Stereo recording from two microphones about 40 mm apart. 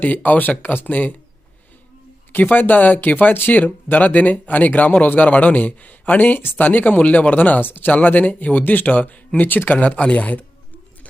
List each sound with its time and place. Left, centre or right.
0.0 s speech: left
2.3 s speech: left
9.8 s speech: left